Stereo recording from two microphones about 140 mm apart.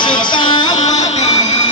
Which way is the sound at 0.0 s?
35° left (ahead or behind).